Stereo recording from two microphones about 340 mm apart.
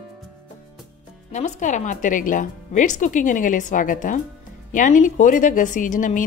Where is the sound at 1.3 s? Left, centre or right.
Left.